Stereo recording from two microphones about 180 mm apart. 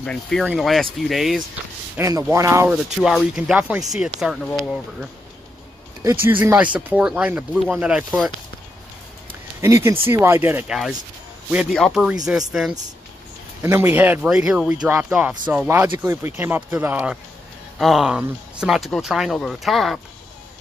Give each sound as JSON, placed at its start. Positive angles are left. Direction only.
{"t": 0.0, "sound": "speech", "side_deg": 5}
{"t": 2.0, "sound": "speech", "side_deg": -15}
{"t": 3.0, "sound": "speech", "side_deg": 0}
{"t": 6.0, "sound": "speech", "side_deg": -15}
{"t": 9.3, "sound": "a sound", "side_deg": -15}
{"t": 9.8, "sound": "speech", "side_deg": -15}
{"t": 10.7, "sound": "speech", "side_deg": 0}
{"t": 13.6, "sound": "speech", "side_deg": -15}